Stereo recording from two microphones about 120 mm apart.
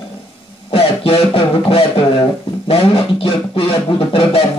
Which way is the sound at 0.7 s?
50° left (ahead or behind).